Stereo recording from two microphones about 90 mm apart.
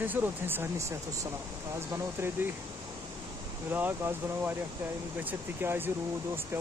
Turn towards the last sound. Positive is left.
turn(degrees=-25)  # may be behind; listen again after turning